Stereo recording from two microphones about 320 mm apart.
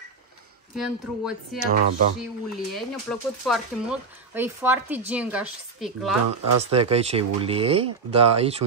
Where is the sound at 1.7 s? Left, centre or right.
Right.